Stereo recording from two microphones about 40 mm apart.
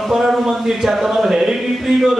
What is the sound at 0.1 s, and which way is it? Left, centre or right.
A man's voice, centre.